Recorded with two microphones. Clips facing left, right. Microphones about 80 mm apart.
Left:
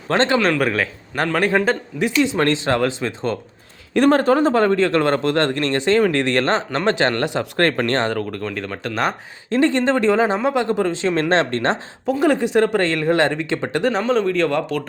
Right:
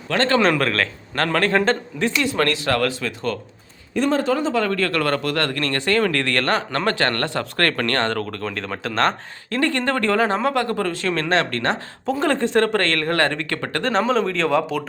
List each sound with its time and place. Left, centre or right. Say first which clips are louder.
0.1 s speech: left 3 dB; left
0.6 s speech: left 2 dB; centre
3.9 s speech: left 5 dB; left
4.7 s speech: left 4 dB; left
8.1 s speech: left 2 dB; centre
9.5 s speech: left 4 dB; left
12.0 s speech: left 3 dB; centre
13.9 s speech: right 3 dB; centre